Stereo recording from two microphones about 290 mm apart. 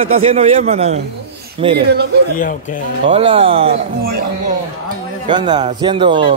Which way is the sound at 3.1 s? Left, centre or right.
Centre.